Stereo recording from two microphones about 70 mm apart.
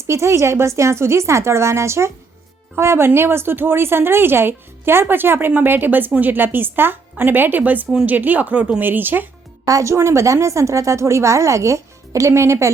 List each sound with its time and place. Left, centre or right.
0.0 s a woman's voice: right
9.6 s a woman's voice: right